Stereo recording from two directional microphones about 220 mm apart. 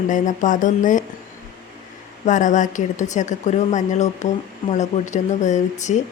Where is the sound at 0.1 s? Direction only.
35° left (ahead or behind).